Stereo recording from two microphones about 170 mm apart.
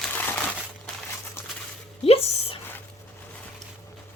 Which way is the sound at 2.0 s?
35° left (ahead or behind).